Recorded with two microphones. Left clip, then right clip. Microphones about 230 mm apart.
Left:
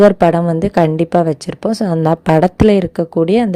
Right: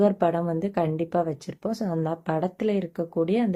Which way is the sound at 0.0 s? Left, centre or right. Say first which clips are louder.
Left 13 dB; left.